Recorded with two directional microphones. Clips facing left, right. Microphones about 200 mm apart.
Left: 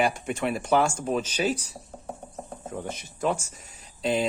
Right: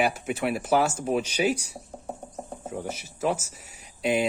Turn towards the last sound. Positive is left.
turn(degrees=-10)  # may be behind; listen again after turning